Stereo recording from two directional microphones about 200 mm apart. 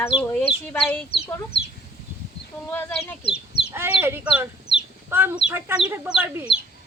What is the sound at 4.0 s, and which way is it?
Speech, 10° right (ahead or behind).